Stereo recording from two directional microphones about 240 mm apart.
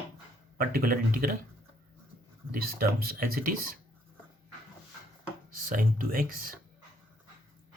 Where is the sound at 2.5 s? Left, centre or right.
Right.